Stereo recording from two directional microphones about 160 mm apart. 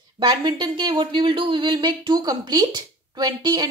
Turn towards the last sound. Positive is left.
turn(degrees=-25)  # may be behind; listen again after turning